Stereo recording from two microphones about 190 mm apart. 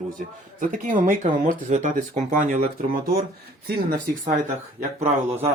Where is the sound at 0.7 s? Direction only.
40° right (ahead or behind).